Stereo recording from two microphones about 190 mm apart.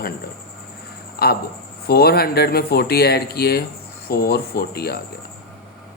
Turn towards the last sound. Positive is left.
turn(degrees=55)  # may be behind; listen again after turning